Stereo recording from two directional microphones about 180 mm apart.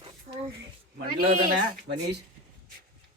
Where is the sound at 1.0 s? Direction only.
55° right (ahead or behind).